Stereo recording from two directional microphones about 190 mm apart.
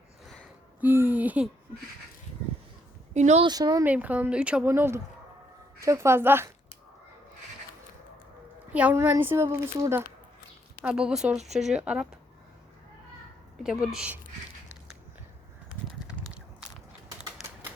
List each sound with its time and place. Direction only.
0.8 s a sound: 10° right (ahead or behind)
3.2 s speech: 35° right (ahead or behind)
3.4 s speech: 20° right (ahead or behind)
3.8 s a woman's voice: 10° right (ahead or behind)
8.7 s a woman's voice: 10° right (ahead or behind)
13.6 s speech: 5° right (ahead or behind)
16.0 s a sound: 5° right (ahead or behind)